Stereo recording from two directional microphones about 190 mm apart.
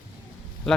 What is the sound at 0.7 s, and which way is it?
Speech, centre (ahead or behind).